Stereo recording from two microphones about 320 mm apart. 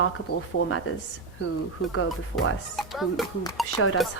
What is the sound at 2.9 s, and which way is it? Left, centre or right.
Speech, centre.